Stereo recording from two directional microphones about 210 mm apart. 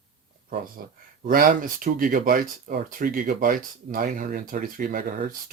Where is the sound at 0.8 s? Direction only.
45° right (ahead or behind).